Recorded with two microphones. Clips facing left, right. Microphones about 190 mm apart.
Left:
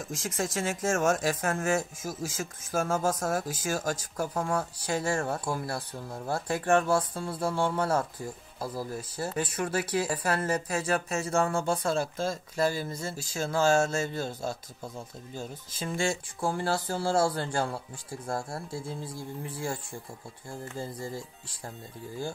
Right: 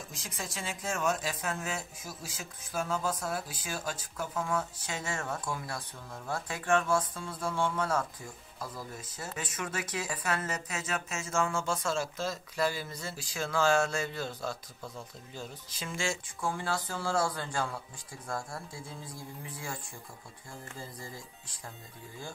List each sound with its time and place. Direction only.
0.1 s speech: 45° left (ahead or behind)
11.9 s speech: 50° left (ahead or behind)
14.5 s speech: 25° left (ahead or behind)
15.3 s speech: 40° left (ahead or behind)
20.4 s speech: 30° left (ahead or behind)